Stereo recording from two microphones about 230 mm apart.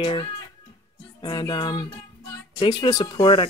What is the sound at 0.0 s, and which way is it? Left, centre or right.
Speech, left.